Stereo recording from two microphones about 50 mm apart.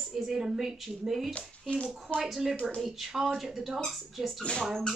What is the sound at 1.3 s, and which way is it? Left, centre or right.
Speech, left.